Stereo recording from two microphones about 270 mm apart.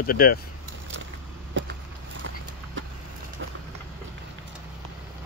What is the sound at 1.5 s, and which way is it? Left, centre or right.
Vehicle, right.